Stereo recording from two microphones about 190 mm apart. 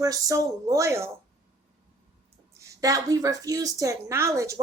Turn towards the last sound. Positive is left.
turn(degrees=-15)  # may be behind; listen again after turning